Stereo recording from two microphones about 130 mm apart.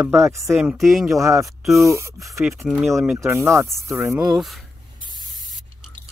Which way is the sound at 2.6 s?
Centre (ahead or behind).